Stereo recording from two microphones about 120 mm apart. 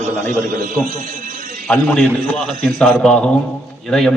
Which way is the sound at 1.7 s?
10° left (ahead or behind).